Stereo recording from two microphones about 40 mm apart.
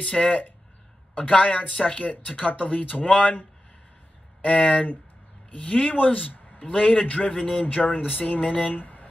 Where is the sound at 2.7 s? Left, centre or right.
Left.